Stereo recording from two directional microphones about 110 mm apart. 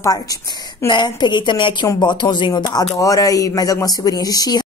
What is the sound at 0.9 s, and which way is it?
A woman's voice, 45° left (ahead or behind).